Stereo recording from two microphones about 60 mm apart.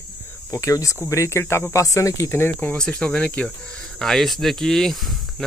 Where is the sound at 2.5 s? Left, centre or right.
Left.